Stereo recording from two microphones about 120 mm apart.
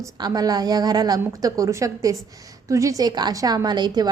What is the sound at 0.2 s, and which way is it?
A woman's voice, 35° right (ahead or behind).